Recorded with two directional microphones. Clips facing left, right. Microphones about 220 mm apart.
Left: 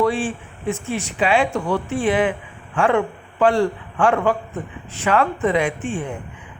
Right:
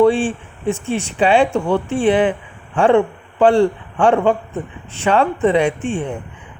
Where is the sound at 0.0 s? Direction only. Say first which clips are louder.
Right 6 dB; 30° right (ahead or behind).